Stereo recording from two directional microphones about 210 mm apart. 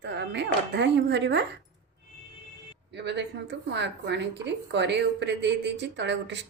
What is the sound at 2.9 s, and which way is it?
A woman's voice, 55° right (ahead or behind).